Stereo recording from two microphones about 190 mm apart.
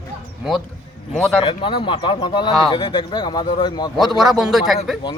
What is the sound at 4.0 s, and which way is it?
Speech, centre (ahead or behind).